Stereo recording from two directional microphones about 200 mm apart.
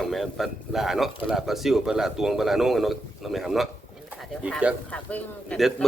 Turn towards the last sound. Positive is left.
turn(degrees=5)  # may be behind; listen again after turning